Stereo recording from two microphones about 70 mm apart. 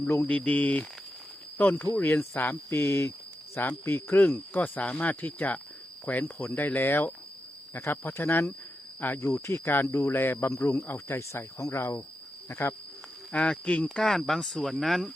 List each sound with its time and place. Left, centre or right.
0.0 s speech: left
0.3 s speech: left
13.3 s speech: centre
13.9 s speech: centre